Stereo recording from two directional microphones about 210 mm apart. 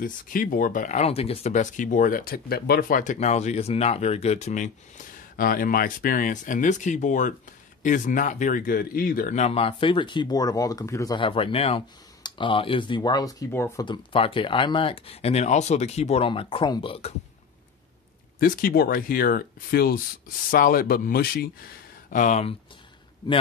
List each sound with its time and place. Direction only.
0.0 s speech: 40° left (ahead or behind); by 17.1 s 25° left (ahead or behind)
18.4 s speech: 45° left (ahead or behind)
22.1 s speech: 35° left (ahead or behind)